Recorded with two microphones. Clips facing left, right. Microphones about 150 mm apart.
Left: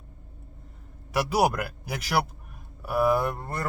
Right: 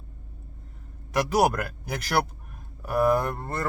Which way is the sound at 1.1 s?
5° left (ahead or behind).